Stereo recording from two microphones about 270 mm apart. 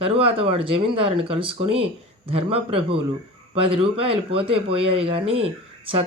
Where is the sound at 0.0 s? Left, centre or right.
Right.